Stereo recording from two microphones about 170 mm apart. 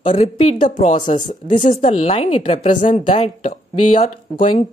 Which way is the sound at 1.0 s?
25° left (ahead or behind).